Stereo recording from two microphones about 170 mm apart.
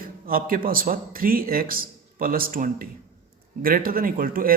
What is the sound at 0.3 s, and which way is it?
A man's voice, 55° right (ahead or behind).